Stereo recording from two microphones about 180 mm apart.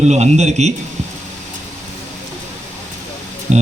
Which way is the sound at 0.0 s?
40° right (ahead or behind).